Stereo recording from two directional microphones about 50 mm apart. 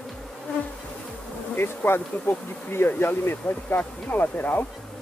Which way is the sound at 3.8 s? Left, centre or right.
Left.